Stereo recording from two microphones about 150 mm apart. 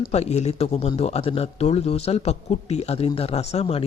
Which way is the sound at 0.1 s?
45° left (ahead or behind).